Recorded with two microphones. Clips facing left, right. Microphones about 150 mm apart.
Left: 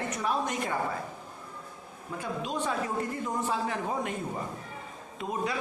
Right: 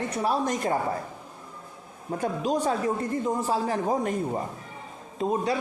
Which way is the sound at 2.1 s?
40° right (ahead or behind).